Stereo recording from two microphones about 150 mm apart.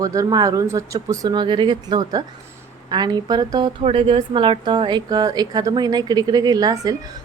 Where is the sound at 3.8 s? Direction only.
35° right (ahead or behind).